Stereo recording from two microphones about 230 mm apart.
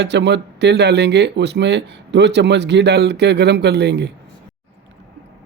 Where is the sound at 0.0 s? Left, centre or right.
Right.